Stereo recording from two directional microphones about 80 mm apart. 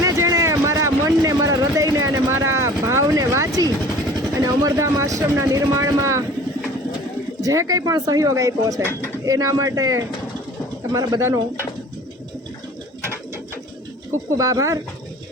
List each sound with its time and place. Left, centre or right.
0.0 s a sound: right
2.3 s speech: right
7.4 s speech: right
14.3 s speech: right